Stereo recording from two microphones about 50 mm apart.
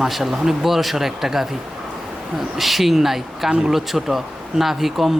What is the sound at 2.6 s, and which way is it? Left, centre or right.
Speech, centre.